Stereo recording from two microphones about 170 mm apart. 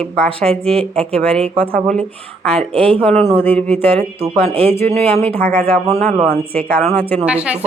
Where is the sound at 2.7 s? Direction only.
35° right (ahead or behind).